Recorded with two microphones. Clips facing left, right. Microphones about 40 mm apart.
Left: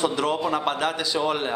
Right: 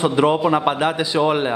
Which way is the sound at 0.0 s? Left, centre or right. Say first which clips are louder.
Right 7 dB; right.